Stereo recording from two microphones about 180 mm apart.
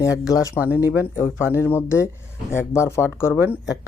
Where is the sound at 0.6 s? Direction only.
10° right (ahead or behind).